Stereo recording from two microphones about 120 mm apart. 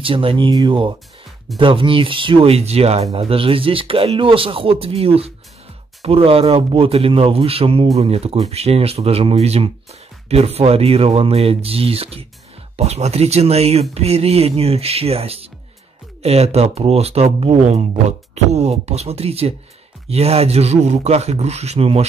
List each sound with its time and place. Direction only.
0.0 s speech: 50° right (ahead or behind)